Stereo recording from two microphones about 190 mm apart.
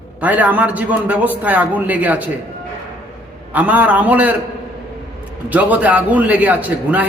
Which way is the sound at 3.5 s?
10° right (ahead or behind).